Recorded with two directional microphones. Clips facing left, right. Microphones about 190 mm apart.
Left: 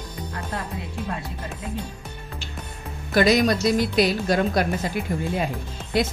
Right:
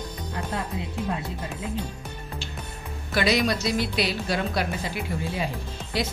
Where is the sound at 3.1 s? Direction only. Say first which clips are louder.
Left 5 dB; 45° left (ahead or behind).